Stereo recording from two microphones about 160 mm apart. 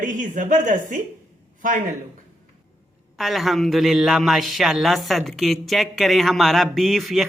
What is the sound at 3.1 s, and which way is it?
A man's voice, centre (ahead or behind).